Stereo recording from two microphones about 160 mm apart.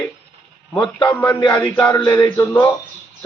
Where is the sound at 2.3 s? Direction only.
15° left (ahead or behind).